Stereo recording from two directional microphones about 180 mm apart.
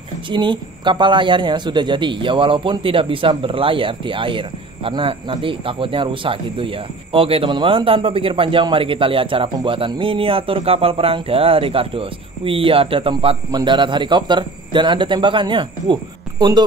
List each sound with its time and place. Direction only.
0.3 s a man's voice: 25° right (ahead or behind)